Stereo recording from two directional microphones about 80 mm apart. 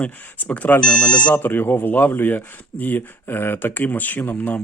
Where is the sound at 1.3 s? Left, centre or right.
Left.